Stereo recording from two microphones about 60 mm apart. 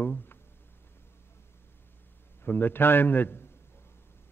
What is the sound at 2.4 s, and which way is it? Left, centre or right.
A man's voice, left.